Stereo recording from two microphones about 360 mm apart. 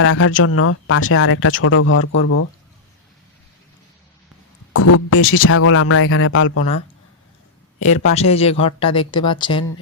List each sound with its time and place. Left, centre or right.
0.0 s speech: left
4.7 s speech: left
8.1 s speech: centre